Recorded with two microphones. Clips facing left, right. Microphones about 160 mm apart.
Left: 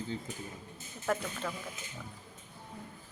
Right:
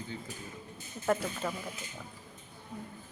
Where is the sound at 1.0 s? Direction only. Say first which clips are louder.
Right 3 dB; 10° right (ahead or behind).